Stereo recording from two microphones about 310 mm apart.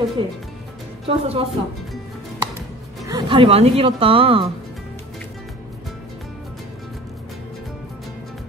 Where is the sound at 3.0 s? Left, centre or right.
Centre.